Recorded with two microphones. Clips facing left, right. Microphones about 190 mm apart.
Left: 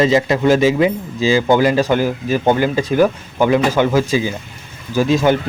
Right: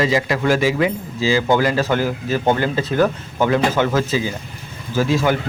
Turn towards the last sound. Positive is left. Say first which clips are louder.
# left 4 dB
turn(degrees=20)  # may be behind; listen again after turning